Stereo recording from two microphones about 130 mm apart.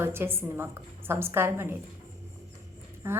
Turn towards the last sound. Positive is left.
turn(degrees=-20)  # may be behind; listen again after turning